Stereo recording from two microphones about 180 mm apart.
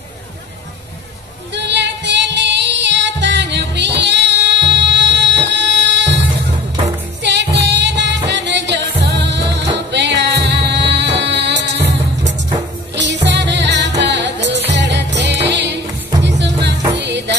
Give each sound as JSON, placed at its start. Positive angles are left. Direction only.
{"t": 1.5, "sound": "music", "side_deg": -75}
{"t": 7.2, "sound": "music", "side_deg": -75}
{"t": 12.9, "sound": "music", "side_deg": -80}